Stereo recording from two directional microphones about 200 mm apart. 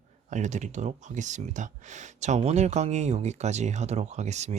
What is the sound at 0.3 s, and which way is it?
Speech, 35° right (ahead or behind).